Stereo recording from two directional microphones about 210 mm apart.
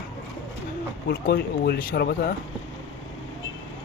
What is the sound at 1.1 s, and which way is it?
Speech, 50° left (ahead or behind).